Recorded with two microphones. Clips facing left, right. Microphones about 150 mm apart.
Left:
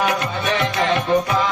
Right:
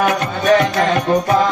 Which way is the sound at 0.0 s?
45° right (ahead or behind).